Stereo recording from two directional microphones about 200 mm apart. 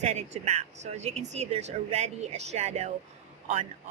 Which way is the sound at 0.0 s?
35° right (ahead or behind).